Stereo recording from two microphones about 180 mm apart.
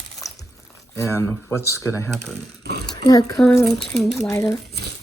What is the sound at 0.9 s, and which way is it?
Speech, 15° left (ahead or behind).